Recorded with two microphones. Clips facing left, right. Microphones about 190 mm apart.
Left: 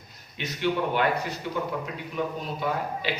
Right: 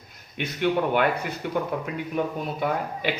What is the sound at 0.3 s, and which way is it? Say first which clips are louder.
Speech: right 3 dB; 55° right (ahead or behind).